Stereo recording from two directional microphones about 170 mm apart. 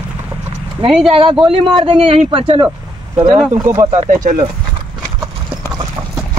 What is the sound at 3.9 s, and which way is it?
Speech, 45° right (ahead or behind).